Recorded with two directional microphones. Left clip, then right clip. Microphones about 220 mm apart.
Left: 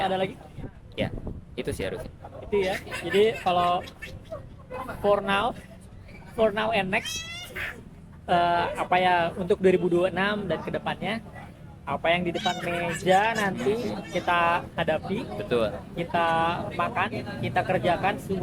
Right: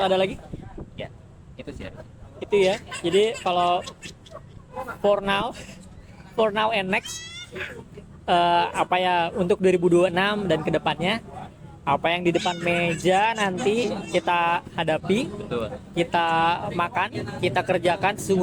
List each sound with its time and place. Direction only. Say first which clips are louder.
0.0 s speech: right 5 dB; 45° right (ahead or behind)
1.5 s speech: left 7 dB; 50° left (ahead or behind)
2.4 s speech: right 6 dB; 45° right (ahead or behind)
5.0 s speech: right 1 dB; 45° right (ahead or behind)
7.0 s speech: left 2 dB; 10° left (ahead or behind)
8.3 s speech: right 3 dB; 40° right (ahead or behind)
15.4 s speech: left 4 dB; 45° left (ahead or behind)
16.0 s speech: right 3 dB; 45° right (ahead or behind)